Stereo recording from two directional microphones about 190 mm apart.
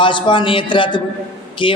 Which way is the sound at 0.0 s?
25° left (ahead or behind).